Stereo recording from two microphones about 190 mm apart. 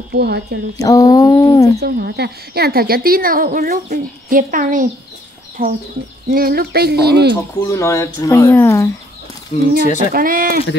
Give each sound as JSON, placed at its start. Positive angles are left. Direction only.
{"t": 0.1, "sound": "speech", "side_deg": -60}
{"t": 0.7, "sound": "speech", "side_deg": 20}
{"t": 1.8, "sound": "speech", "side_deg": -60}
{"t": 6.3, "sound": "speech", "side_deg": -50}
{"t": 7.5, "sound": "speech", "side_deg": 15}
{"t": 9.8, "sound": "speech", "side_deg": 40}
{"t": 10.1, "sound": "speech", "side_deg": -50}